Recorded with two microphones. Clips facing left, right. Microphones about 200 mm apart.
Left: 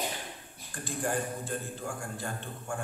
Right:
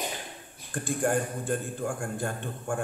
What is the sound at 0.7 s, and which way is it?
A man's voice, 50° right (ahead or behind).